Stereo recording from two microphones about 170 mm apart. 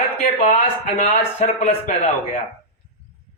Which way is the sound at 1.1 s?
40° left (ahead or behind).